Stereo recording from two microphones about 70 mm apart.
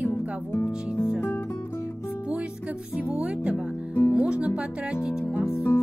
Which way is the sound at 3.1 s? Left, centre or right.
Centre.